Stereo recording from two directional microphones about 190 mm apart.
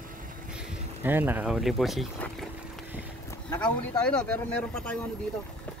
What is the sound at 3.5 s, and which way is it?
Speech, 5° left (ahead or behind).